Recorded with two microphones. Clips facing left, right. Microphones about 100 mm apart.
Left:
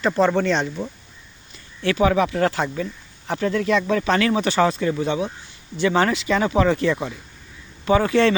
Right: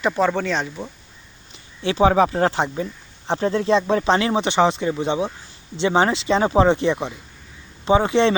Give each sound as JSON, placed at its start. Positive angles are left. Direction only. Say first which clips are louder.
{"t": 0.3, "sound": "speech", "louder": "left 2 dB", "side_deg": -5}
{"t": 1.5, "sound": "speech", "louder": "even", "side_deg": -25}